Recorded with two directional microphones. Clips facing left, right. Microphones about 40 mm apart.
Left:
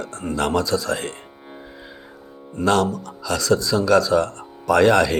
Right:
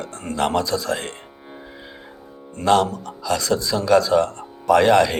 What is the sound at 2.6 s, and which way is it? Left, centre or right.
Speech, centre.